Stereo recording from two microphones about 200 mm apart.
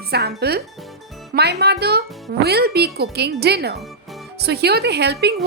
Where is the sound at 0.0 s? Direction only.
55° right (ahead or behind).